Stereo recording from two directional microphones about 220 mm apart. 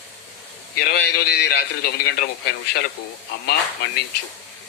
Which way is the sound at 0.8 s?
45° left (ahead or behind).